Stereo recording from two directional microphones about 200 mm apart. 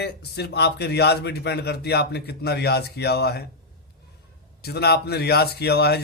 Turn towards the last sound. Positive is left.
turn(degrees=55)  # may be behind; listen again after turning